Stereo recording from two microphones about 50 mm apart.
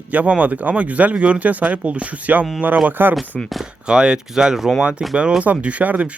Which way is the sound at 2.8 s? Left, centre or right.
Right.